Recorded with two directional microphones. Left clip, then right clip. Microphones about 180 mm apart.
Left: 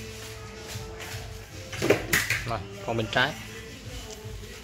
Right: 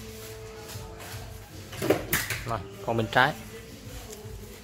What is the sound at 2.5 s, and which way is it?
Speech, 20° right (ahead or behind).